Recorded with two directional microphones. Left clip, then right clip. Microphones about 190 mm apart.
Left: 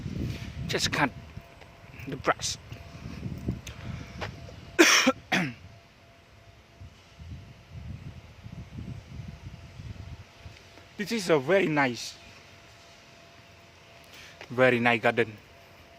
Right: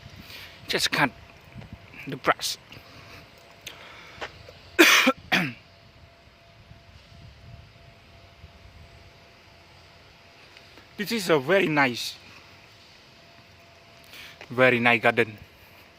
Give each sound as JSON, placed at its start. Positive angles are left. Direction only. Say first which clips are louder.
{"t": 0.3, "sound": "a sound", "louder": "right 4 dB", "side_deg": -10}
{"t": 2.0, "sound": "speech", "louder": "right 3 dB", "side_deg": -15}
{"t": 4.2, "sound": "cough", "louder": "right 1 dB", "side_deg": -10}
{"t": 10.9, "sound": "speech", "louder": "right 2 dB", "side_deg": -10}
{"t": 14.1, "sound": "a sound", "louder": "right 5 dB", "side_deg": -15}
{"t": 14.5, "sound": "speech", "louder": "right 3 dB", "side_deg": -10}